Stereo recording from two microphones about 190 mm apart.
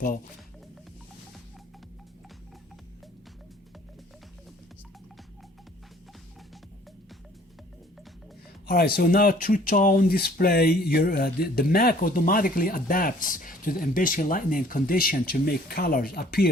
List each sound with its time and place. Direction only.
8.6 s speech: 55° left (ahead or behind)